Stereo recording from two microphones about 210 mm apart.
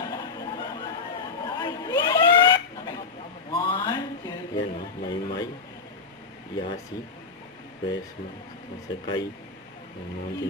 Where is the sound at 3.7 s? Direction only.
15° left (ahead or behind).